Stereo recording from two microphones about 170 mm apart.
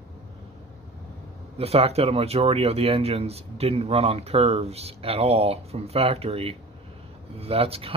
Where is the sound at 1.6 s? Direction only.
35° right (ahead or behind).